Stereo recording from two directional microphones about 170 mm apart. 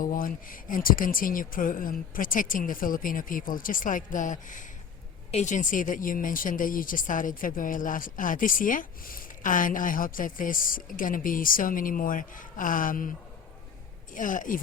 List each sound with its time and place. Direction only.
0.0 s speech: 55° left (ahead or behind)
14.1 s speech: 50° left (ahead or behind)